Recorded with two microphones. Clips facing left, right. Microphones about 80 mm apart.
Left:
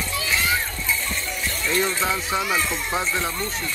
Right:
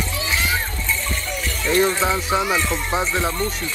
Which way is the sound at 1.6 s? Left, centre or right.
Centre.